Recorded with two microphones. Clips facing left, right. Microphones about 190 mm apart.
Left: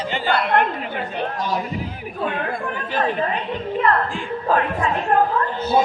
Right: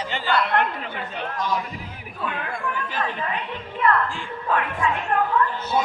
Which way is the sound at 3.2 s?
35° left (ahead or behind).